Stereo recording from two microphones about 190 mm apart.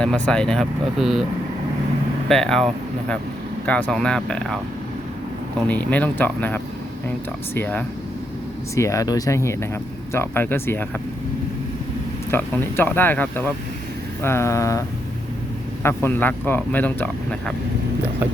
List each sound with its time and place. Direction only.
0.0 s speech: 5° left (ahead or behind)
2.3 s speech: centre (ahead or behind)
3.7 s speech: 10° left (ahead or behind)
5.6 s speech: 10° left (ahead or behind)
12.3 s speech: 10° left (ahead or behind)
16.0 s speech: 10° left (ahead or behind)